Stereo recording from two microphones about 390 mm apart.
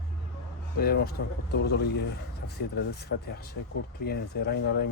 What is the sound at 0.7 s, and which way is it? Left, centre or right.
Speech, left.